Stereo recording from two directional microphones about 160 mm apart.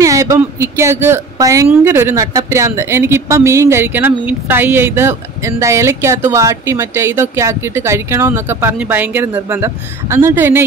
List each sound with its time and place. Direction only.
0.0 s speech: 20° right (ahead or behind)